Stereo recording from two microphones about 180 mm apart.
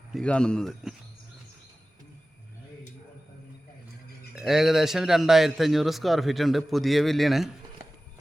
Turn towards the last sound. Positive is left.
turn(degrees=0)  # may be behind; listen again after turning